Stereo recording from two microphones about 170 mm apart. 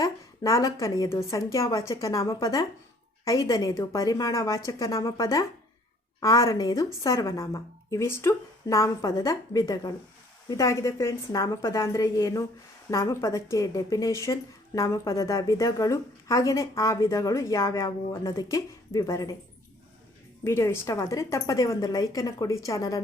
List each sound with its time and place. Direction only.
0.0 s a woman's voice: 20° left (ahead or behind)
20.4 s a woman's voice: 15° left (ahead or behind)